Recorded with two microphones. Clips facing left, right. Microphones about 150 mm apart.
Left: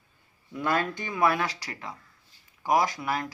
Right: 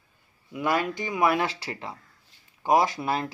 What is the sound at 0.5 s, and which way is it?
Speech, 15° right (ahead or behind).